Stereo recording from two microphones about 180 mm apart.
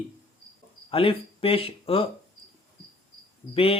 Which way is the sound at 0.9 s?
30° left (ahead or behind).